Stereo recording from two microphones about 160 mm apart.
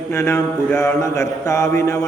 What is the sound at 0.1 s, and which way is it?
Mantra, 15° left (ahead or behind).